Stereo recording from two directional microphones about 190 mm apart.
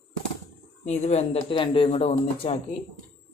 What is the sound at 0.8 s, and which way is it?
Speech, 35° left (ahead or behind).